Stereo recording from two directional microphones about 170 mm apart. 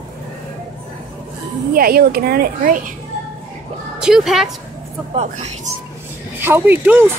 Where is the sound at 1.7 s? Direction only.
60° right (ahead or behind).